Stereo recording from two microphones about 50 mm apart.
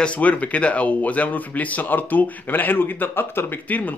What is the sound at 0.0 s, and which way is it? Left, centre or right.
Speech, left.